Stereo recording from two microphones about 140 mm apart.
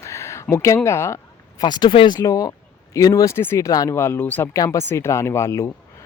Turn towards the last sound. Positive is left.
turn(degrees=20)  # may be behind; listen again after turning